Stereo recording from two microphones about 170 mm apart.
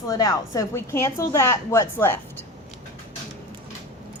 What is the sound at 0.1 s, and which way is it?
A woman's voice, 20° left (ahead or behind).